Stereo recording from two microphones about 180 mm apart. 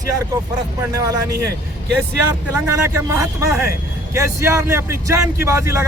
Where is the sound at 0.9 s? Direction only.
20° right (ahead or behind).